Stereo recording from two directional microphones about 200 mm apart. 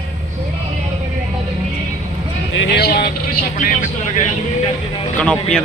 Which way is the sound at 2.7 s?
50° left (ahead or behind).